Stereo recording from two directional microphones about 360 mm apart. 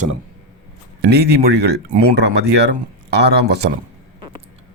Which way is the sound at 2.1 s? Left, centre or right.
Right.